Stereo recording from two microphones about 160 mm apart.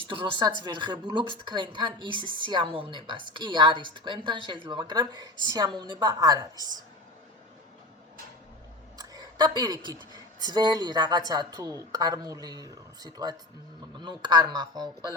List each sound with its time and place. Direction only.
0.0 s a woman's voice: 30° right (ahead or behind)
9.0 s a sound: 25° right (ahead or behind)
10.4 s a woman's voice: 25° right (ahead or behind)